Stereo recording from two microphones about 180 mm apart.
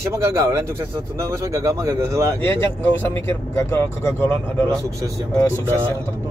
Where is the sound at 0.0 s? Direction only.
15° right (ahead or behind).